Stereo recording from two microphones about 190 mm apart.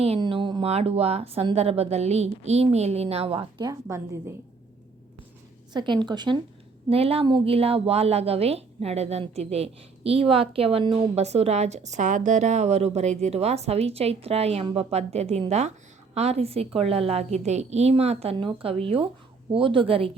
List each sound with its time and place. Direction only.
0.0 s a woman's voice: 30° right (ahead or behind)
5.7 s a woman's voice: 25° right (ahead or behind)